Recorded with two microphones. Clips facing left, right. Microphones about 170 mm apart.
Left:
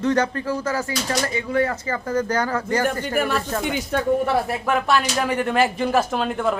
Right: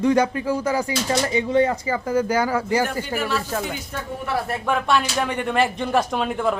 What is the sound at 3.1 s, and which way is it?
Speech, 50° left (ahead or behind).